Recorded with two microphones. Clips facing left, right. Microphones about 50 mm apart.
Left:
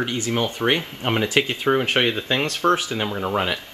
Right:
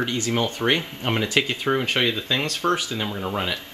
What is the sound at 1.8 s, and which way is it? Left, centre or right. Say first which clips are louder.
Speech: left 2 dB; left.